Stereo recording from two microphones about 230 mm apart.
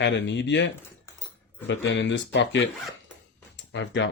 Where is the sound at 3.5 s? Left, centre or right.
Left.